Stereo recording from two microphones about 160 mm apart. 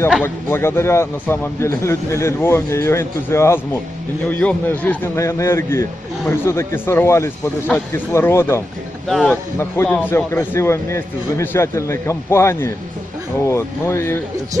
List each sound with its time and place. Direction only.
0.2 s a man's voice: 15° left (ahead or behind)
9.0 s a man's voice: 5° left (ahead or behind)